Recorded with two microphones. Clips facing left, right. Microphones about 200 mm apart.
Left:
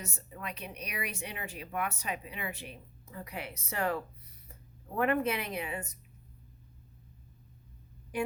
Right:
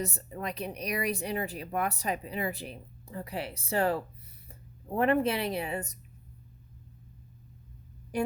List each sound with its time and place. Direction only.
0.0 s speech: 40° right (ahead or behind)